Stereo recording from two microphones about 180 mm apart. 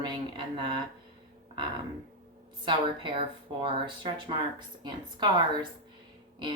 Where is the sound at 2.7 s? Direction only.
25° right (ahead or behind).